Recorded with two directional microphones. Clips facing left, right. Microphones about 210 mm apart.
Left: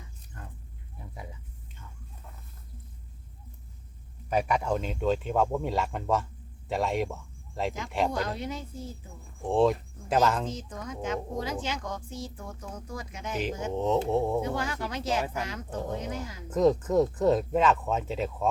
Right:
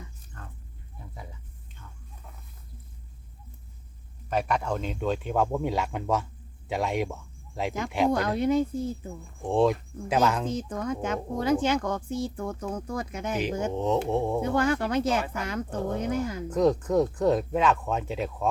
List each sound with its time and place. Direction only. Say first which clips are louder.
4.3 s speech: left 1 dB; 10° left (ahead or behind)
8.1 s speech: right 8 dB; 55° right (ahead or behind)
9.5 s speech: right 1 dB; centre (ahead or behind)
10.5 s speech: right 8 dB; 55° right (ahead or behind)
13.7 s speech: left 2 dB; centre (ahead or behind)
14.5 s speech: right 8 dB; 55° right (ahead or behind)
16.5 s speech: left 1 dB; centre (ahead or behind)